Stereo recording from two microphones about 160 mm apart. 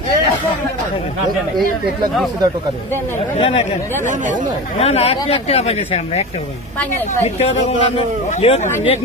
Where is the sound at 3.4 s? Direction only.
35° left (ahead or behind).